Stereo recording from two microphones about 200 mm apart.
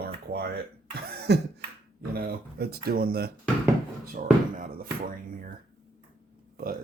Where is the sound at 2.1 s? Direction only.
50° right (ahead or behind).